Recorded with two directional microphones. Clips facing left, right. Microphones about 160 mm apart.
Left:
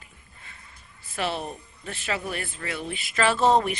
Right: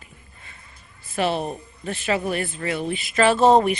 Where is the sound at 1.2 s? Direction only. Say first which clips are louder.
Right 6 dB; 55° right (ahead or behind).